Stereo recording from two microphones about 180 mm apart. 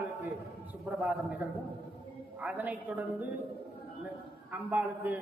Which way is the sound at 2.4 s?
10° right (ahead or behind).